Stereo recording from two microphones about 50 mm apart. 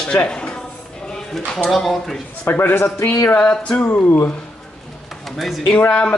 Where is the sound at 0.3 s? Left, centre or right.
Centre.